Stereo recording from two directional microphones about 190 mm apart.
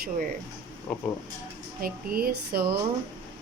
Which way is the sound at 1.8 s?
50° right (ahead or behind).